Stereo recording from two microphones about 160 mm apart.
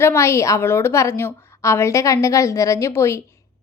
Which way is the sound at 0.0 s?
15° left (ahead or behind).